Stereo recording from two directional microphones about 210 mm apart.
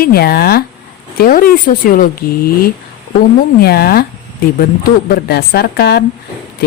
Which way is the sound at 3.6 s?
50° left (ahead or behind).